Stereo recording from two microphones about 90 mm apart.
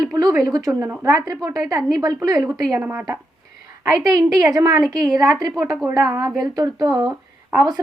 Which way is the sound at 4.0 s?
45° right (ahead or behind).